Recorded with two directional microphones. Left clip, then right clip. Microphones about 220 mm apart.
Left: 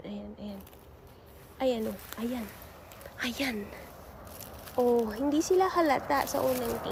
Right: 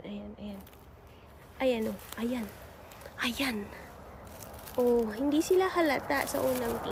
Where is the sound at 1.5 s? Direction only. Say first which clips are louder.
Even; 10° right (ahead or behind).